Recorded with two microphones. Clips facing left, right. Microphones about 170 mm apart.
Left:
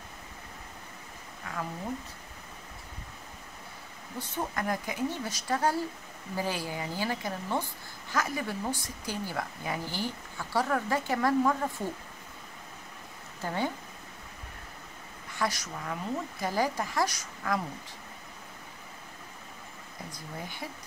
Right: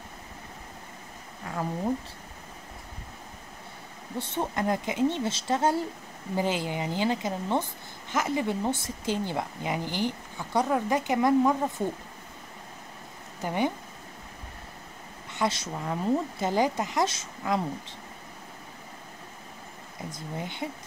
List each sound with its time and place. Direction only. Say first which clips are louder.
1.5 s a sound: right 4 dB; 35° right (ahead or behind)
4.2 s a woman's voice: right 4 dB; 25° right (ahead or behind)
13.4 s speech: right 4 dB; 15° right (ahead or behind)
15.3 s a woman's voice: right 4 dB; 25° right (ahead or behind)
20.1 s a woman's voice: right 6 dB; 20° right (ahead or behind)